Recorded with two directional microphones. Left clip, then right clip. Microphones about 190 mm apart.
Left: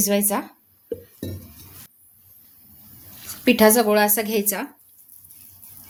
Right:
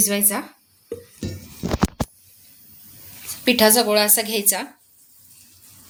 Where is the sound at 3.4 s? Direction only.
40° left (ahead or behind).